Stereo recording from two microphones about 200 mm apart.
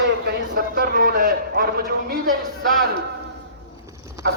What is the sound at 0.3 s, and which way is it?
A man's voice, 45° right (ahead or behind).